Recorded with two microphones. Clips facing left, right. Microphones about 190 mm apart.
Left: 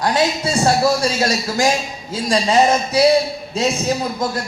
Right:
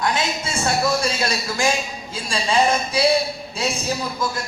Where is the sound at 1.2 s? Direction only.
40° left (ahead or behind).